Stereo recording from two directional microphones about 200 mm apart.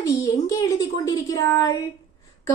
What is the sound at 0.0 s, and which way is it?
A woman's voice, 15° left (ahead or behind).